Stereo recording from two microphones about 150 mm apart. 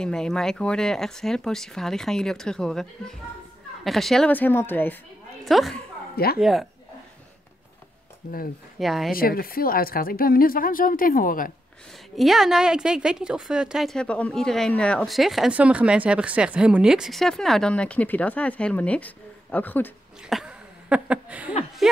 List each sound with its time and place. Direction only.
0.0 s a woman's voice: 5° left (ahead or behind)
5.4 s a woman's voice: centre (ahead or behind)
6.1 s speech: 90° left
6.4 s a woman's voice: centre (ahead or behind)
8.7 s a woman's voice: centre (ahead or behind)
9.1 s speech: 75° left (ahead or behind)
12.2 s a woman's voice: centre (ahead or behind)
20.2 s speech: 5° right (ahead or behind)